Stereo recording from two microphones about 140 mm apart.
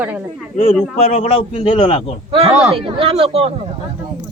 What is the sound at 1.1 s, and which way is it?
A man's voice, 45° left (ahead or behind).